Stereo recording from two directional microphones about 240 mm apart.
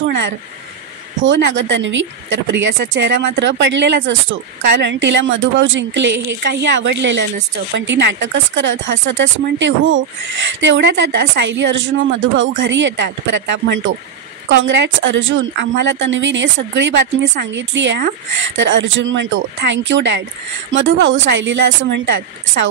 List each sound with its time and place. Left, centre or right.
1.2 s speech: right